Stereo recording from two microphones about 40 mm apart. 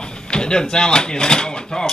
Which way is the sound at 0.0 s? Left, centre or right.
Left.